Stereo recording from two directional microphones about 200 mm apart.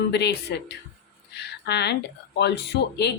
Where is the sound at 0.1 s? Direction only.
55° left (ahead or behind).